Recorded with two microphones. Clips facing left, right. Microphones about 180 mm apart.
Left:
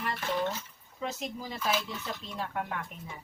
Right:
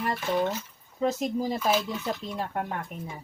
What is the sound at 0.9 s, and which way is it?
Speech, 40° right (ahead or behind).